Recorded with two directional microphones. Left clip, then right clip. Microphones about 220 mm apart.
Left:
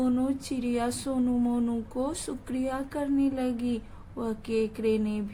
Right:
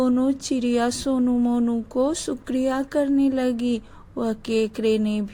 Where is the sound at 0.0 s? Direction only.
30° right (ahead or behind).